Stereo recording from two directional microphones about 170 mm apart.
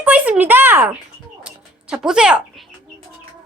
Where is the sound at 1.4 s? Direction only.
5° right (ahead or behind).